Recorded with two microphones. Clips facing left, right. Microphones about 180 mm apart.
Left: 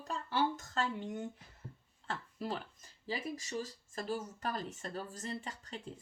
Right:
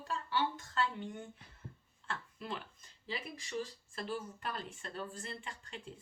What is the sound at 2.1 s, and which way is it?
Speech, 40° left (ahead or behind).